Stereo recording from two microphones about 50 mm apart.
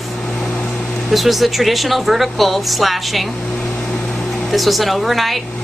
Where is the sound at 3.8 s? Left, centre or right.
Centre.